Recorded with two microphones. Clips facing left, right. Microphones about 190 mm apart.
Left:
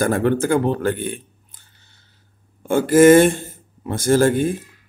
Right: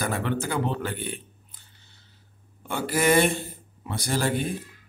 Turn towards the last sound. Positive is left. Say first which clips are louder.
# left 11 dB
turn(degrees=45)  # may be behind; listen again after turning